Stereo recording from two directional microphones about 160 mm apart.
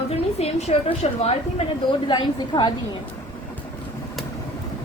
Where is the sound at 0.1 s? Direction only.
40° left (ahead or behind).